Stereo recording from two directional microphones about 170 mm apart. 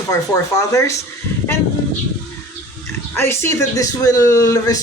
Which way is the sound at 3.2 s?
15° left (ahead or behind).